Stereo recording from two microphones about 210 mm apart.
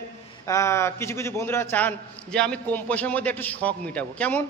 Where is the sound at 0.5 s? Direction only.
15° left (ahead or behind).